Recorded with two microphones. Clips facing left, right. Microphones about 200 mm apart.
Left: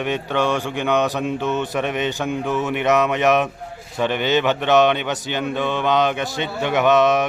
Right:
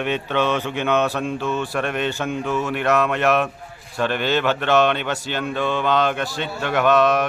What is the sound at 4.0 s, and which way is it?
Speech, 15° left (ahead or behind).